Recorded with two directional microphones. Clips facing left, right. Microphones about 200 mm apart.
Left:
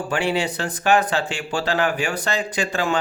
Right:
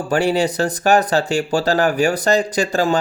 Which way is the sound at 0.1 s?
40° right (ahead or behind).